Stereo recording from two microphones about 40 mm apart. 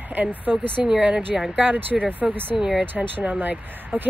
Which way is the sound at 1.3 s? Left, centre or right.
Centre.